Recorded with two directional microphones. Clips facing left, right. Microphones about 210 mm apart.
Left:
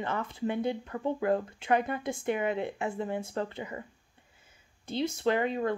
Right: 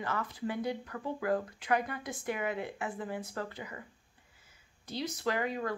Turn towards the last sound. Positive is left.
turn(degrees=25)  # may be behind; listen again after turning